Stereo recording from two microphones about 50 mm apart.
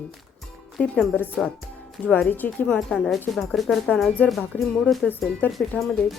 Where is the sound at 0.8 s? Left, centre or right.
Left.